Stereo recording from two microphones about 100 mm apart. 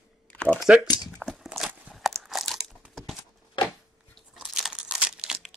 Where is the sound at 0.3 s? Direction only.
15° left (ahead or behind).